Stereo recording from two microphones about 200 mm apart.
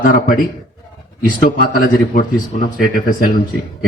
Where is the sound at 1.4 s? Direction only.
45° left (ahead or behind).